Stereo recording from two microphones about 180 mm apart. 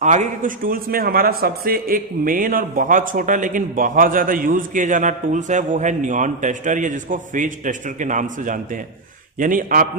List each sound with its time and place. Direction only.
0.0 s a man's voice: 40° right (ahead or behind)